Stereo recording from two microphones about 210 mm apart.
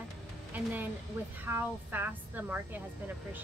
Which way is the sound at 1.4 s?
10° right (ahead or behind).